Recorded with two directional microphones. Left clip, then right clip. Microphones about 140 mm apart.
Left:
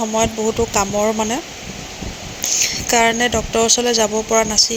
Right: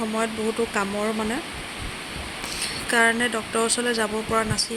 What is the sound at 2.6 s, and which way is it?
Speech, 25° left (ahead or behind).